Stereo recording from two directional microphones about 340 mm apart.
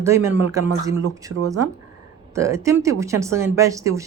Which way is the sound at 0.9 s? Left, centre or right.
Right.